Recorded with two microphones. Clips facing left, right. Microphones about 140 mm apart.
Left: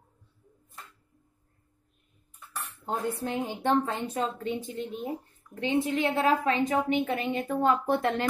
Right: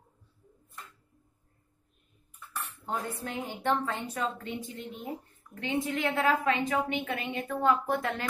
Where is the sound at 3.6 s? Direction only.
30° left (ahead or behind).